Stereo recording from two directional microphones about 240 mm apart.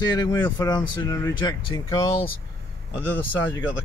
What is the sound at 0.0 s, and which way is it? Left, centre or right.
Speech, centre.